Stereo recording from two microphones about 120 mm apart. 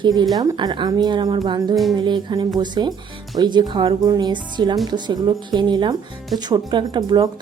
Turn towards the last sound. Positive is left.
turn(degrees=-35)  # may be behind; listen again after turning